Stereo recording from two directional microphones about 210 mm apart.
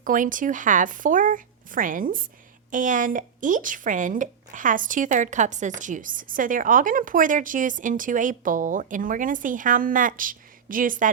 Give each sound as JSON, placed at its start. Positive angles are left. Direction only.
{"t": 0.0, "sound": "speech", "side_deg": -40}